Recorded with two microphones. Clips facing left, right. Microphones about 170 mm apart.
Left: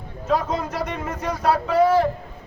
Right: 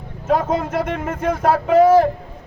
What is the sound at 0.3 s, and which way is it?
A man's voice, 50° right (ahead or behind).